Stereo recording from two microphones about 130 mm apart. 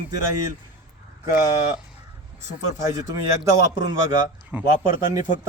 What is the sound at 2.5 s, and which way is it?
Speech, 70° left (ahead or behind).